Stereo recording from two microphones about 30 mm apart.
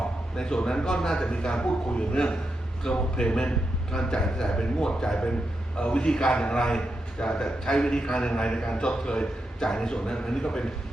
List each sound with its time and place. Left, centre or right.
0.3 s speech: left
1.3 s a man's voice: left
9.6 s speech: centre